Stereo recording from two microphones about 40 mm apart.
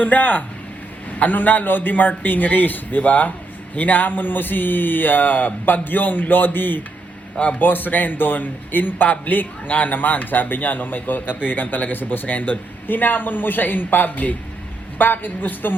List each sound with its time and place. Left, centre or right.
0.0 s a man's voice: left